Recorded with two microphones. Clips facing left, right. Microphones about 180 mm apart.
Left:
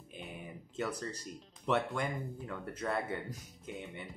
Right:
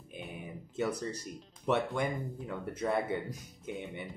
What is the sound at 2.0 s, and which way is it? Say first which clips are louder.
Speech: right 3 dB; 10° right (ahead or behind).